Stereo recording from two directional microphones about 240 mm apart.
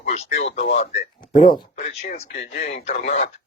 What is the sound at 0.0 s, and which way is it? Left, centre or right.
Speech, left.